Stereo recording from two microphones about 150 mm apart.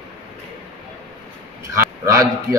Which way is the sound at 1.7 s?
20° right (ahead or behind).